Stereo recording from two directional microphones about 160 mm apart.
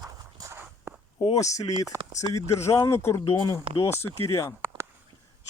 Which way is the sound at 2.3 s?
20° left (ahead or behind).